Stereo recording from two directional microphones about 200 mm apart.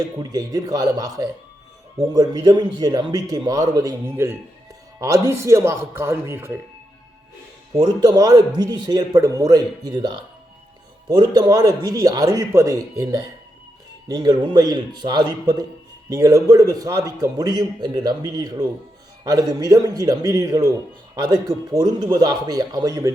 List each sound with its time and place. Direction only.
0.0 s a man's voice: 20° right (ahead or behind)
7.8 s a man's voice: 20° right (ahead or behind)